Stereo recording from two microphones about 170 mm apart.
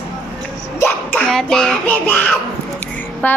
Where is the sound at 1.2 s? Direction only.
5° left (ahead or behind).